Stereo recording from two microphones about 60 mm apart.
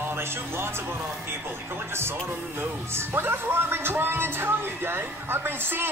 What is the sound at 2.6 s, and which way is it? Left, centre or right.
Speech, right.